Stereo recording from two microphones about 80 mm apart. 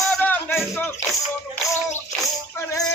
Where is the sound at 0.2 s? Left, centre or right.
Left.